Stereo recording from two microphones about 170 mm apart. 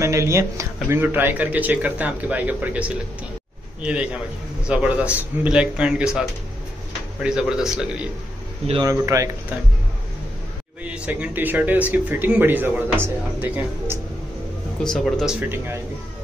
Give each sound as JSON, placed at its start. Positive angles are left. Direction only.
{"t": 0.0, "sound": "a man's voice", "side_deg": -15}
{"t": 8.8, "sound": "speech", "side_deg": -20}
{"t": 10.8, "sound": "speech", "side_deg": -10}
{"t": 14.8, "sound": "a man's voice", "side_deg": 0}
{"t": 15.5, "sound": "speech", "side_deg": -15}